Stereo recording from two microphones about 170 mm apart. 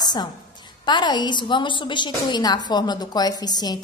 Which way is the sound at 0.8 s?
25° left (ahead or behind).